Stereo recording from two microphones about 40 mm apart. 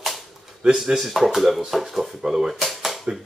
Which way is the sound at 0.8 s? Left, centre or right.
Centre.